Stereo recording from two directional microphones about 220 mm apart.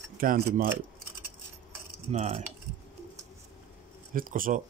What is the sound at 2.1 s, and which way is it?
Speech, 35° right (ahead or behind).